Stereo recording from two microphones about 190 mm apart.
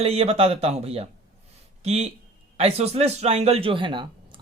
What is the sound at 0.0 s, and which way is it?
Speech, 30° right (ahead or behind).